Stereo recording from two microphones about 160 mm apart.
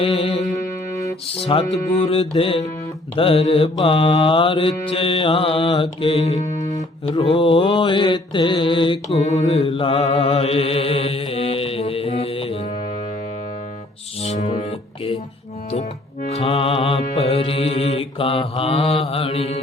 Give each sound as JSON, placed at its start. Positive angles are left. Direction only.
{"t": 0.0, "sound": "music", "side_deg": 35}
{"t": 1.3, "sound": "mantra", "side_deg": 35}
{"t": 6.7, "sound": "speech", "side_deg": 20}
{"t": 7.3, "sound": "mantra", "side_deg": 35}
{"t": 14.2, "sound": "music", "side_deg": 45}
{"t": 16.4, "sound": "mantra", "side_deg": 35}